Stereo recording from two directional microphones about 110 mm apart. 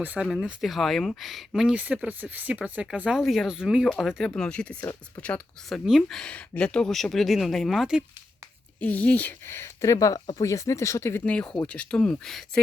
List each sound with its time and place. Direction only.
0.0 s speech: 15° right (ahead or behind)
0.4 s speech: centre (ahead or behind)
1.7 s speech: 15° right (ahead or behind)
8.8 s speech: 15° left (ahead or behind)
11.3 s speech: 10° left (ahead or behind)